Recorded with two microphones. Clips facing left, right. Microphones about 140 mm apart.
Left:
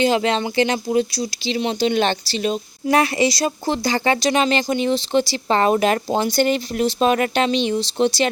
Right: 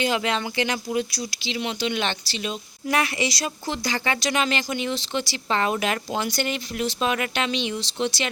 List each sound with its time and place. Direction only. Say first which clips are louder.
0.0 s speech: left 6 dB; 30° left (ahead or behind)